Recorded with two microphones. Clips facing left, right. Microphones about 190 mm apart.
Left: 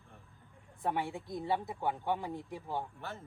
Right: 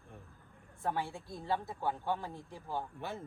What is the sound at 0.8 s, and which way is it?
Speech, 20° left (ahead or behind).